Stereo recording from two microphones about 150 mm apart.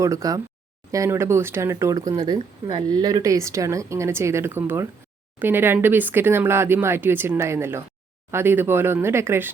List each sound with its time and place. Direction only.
0.0 s speech: 20° right (ahead or behind)